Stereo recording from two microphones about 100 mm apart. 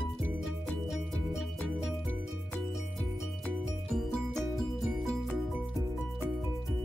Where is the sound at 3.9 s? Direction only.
5° left (ahead or behind).